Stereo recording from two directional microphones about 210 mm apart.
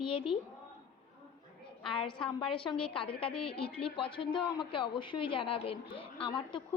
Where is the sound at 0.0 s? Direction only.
25° left (ahead or behind).